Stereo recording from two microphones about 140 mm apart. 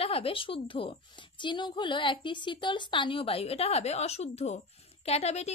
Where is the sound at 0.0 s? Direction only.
45° left (ahead or behind).